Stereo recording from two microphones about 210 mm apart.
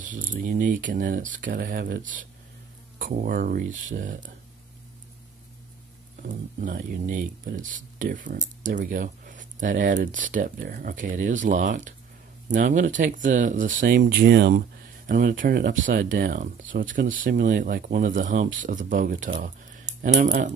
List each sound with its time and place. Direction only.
0.0 s speech: 40° right (ahead or behind)
6.2 s speech: 40° right (ahead or behind)
19.4 s a sound: 40° right (ahead or behind)